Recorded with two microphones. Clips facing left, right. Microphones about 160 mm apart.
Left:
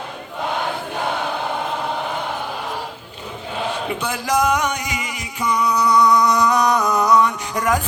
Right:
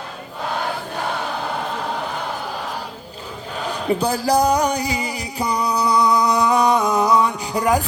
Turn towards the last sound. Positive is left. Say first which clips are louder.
# right 2 dB
turn(degrees=-35)  # may be behind; listen again after turning